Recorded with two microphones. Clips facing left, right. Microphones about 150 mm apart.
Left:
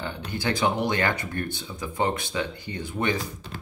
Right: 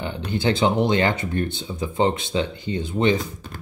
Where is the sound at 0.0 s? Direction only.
20° right (ahead or behind).